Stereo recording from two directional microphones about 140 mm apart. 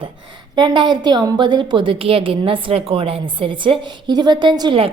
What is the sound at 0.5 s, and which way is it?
A woman's voice, 30° right (ahead or behind).